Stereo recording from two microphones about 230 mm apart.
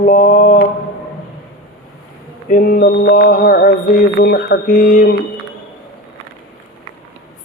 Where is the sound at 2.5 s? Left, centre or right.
Left.